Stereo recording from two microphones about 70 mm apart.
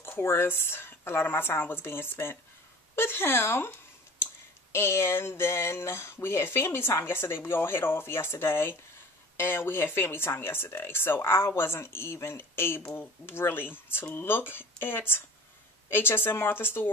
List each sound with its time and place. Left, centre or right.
0.0 s speech: left
4.7 s speech: left